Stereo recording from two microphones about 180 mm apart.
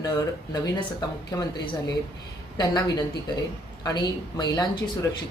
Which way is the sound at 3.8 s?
25° left (ahead or behind).